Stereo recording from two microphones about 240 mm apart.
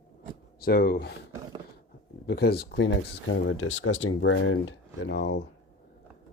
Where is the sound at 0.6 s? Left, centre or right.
Left.